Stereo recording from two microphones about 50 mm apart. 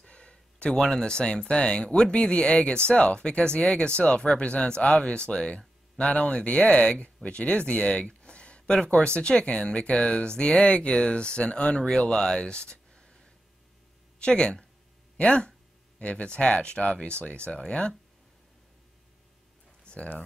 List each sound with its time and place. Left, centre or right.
0.0 s speech: left
19.9 s speech: left